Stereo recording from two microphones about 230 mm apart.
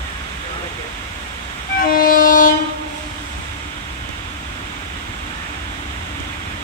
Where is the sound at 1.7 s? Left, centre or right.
Left.